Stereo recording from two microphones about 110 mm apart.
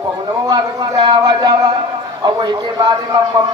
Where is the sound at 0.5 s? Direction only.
40° right (ahead or behind).